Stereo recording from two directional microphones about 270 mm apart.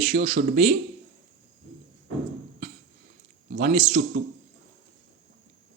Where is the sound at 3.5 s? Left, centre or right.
Right.